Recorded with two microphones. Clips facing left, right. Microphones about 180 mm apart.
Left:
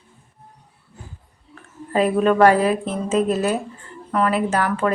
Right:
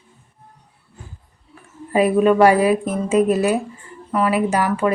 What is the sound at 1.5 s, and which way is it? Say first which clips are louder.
A woman's voice: right 2 dB; 10° right (ahead or behind).